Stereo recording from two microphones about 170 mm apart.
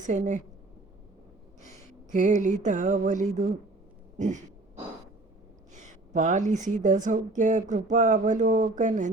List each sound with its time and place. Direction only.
0.0 s a woman's voice: 45° right (ahead or behind)
1.6 s a sound: 45° right (ahead or behind)
4.2 s a woman's voice: 45° right (ahead or behind)
5.7 s a woman's voice: 45° right (ahead or behind)